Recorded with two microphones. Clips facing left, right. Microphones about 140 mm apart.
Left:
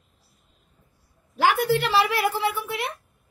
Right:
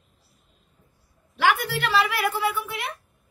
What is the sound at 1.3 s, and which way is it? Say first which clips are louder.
A woman's voice: left 3 dB; 35° left (ahead or behind).